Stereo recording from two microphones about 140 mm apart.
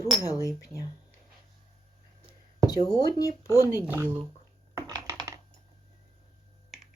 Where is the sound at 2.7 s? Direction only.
25° left (ahead or behind).